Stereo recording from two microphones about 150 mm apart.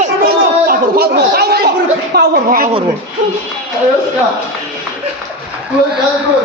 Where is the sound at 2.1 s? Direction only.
80° right.